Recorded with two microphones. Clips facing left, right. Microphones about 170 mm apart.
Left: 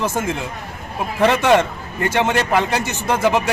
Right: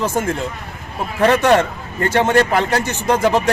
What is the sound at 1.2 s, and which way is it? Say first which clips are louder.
A man's voice: right 1 dB; 10° left (ahead or behind).